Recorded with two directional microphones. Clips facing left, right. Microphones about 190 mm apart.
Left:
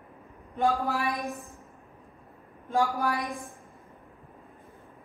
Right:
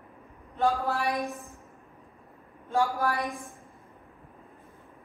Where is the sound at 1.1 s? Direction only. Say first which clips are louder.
Right 2 dB; centre (ahead or behind).